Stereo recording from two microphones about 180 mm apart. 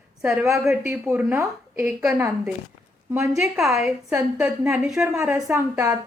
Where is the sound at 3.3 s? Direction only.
Centre (ahead or behind).